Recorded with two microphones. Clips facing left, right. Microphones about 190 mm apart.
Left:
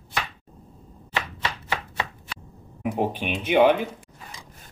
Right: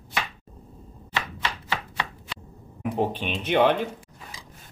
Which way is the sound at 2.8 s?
10° left (ahead or behind).